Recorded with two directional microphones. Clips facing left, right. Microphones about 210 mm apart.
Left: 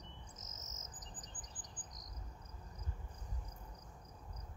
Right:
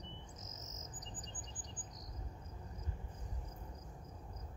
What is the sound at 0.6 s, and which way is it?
Chirp, 45° left (ahead or behind).